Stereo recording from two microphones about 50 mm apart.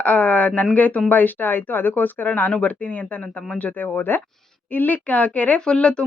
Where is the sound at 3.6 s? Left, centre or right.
Left.